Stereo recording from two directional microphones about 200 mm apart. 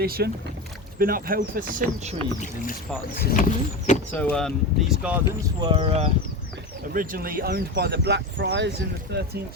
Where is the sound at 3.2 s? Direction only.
50° left (ahead or behind).